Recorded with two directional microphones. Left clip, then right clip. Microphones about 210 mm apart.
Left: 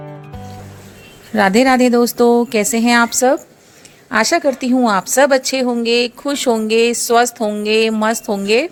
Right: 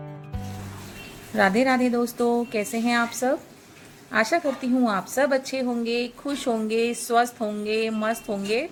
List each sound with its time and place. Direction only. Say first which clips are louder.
1.3 s a woman's voice: left 8 dB; 50° left (ahead or behind)